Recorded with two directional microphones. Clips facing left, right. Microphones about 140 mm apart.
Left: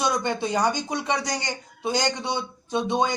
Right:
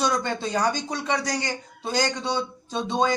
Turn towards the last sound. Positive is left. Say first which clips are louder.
# even
turn(degrees=15)  # may be behind; listen again after turning